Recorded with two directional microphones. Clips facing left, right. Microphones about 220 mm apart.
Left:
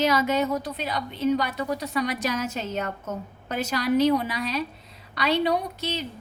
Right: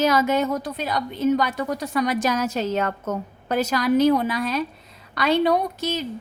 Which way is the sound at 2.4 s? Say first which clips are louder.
Right 6 dB; 90° right.